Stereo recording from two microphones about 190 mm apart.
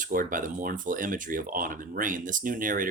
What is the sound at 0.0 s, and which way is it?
Speech, 45° right (ahead or behind).